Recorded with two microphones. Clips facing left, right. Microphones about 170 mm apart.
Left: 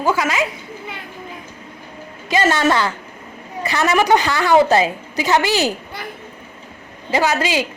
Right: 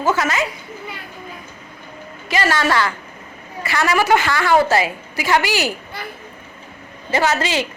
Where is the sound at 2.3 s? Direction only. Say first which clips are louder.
Left 2 dB; 20° left (ahead or behind).